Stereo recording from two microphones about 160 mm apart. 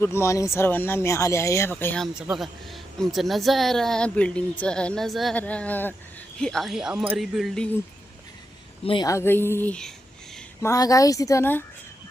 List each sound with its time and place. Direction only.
0.0 s speech: 15° left (ahead or behind)
2.1 s speech: 5° right (ahead or behind)
7.2 s speech: centre (ahead or behind)
8.8 s a woman's voice: 35° left (ahead or behind)
9.0 s speech: 15° left (ahead or behind)
10.6 s speech: 20° left (ahead or behind)